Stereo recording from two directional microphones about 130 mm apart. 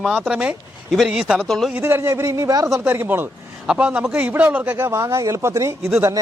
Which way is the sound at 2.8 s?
15° right (ahead or behind).